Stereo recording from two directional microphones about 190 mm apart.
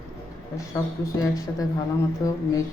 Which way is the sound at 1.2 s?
20° left (ahead or behind).